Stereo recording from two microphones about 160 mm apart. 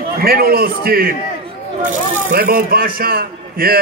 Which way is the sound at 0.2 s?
70° right (ahead or behind).